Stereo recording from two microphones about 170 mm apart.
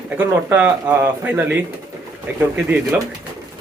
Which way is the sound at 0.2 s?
10° right (ahead or behind).